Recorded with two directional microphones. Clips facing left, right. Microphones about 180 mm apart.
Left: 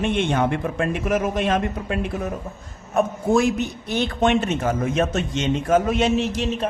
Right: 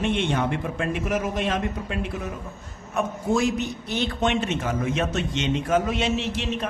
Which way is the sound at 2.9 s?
55° left (ahead or behind).